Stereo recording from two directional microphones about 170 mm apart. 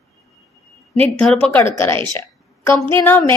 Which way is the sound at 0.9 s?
5° left (ahead or behind).